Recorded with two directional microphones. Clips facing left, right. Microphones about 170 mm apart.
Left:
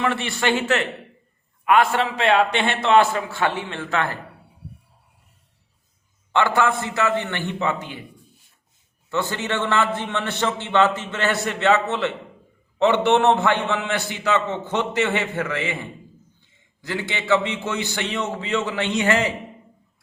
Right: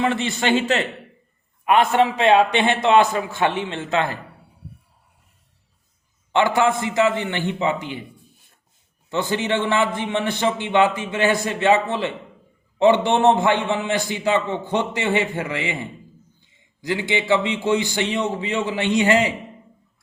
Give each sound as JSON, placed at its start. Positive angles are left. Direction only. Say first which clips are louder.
{"t": 0.0, "sound": "a man's voice", "louder": "right 1 dB", "side_deg": -20}
{"t": 1.6, "sound": "a man's voice", "louder": "right 2 dB", "side_deg": -20}
{"t": 6.3, "sound": "a man's voice", "louder": "right 2 dB", "side_deg": -20}
{"t": 9.0, "sound": "a man's voice", "louder": "right 3 dB", "side_deg": -15}
{"t": 13.2, "sound": "a man's voice", "louder": "right 2 dB", "side_deg": -15}